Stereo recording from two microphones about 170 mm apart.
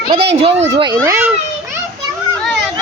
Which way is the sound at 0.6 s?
25° right (ahead or behind).